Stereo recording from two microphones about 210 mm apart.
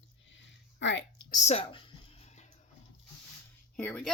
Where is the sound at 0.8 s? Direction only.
60° left (ahead or behind).